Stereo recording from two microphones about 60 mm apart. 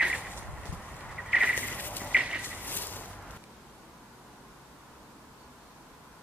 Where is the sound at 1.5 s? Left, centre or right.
Left.